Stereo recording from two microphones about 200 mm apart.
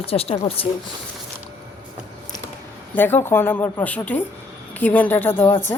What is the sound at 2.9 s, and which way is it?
Speech, 10° left (ahead or behind).